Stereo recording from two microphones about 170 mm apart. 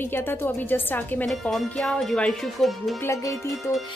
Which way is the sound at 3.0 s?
15° left (ahead or behind).